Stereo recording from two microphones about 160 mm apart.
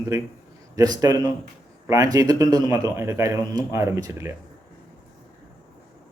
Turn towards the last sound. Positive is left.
turn(degrees=-15)  # may be behind; listen again after turning